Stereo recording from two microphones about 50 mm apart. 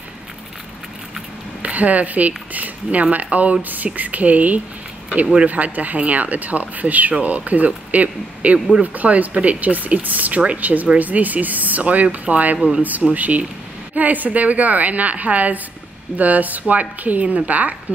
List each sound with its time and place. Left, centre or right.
1.6 s speech: right